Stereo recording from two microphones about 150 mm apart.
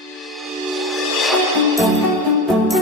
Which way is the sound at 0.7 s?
Centre (ahead or behind).